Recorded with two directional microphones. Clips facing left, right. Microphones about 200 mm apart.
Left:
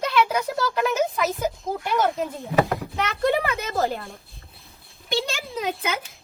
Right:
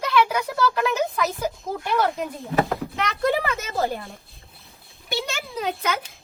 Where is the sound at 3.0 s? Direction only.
Centre (ahead or behind).